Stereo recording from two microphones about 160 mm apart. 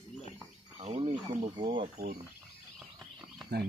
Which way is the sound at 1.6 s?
30° right (ahead or behind).